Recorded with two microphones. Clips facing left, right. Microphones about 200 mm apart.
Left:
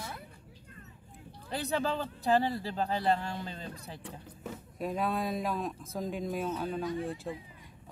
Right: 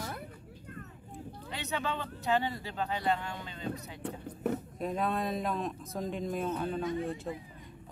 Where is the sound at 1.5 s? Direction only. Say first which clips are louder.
Left 4 dB; 35° left (ahead or behind).